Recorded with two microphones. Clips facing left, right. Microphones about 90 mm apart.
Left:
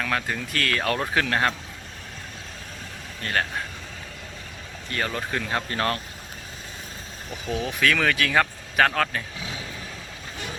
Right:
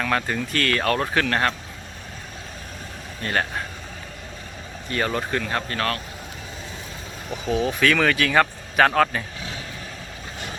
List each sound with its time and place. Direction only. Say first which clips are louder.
0.0 s a man's voice: right 3 dB; centre (ahead or behind)
3.2 s a man's voice: right 2 dB; 5° right (ahead or behind)
4.9 s a man's voice: right 4 dB; 5° right (ahead or behind)
5.7 s speech: left 1 dB; 25° left (ahead or behind)
7.4 s a man's voice: right 4 dB; centre (ahead or behind)
9.4 s vehicle: right 1 dB; 5° left (ahead or behind)